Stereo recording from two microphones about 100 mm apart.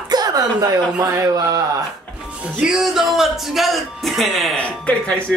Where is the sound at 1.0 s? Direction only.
35° right (ahead or behind).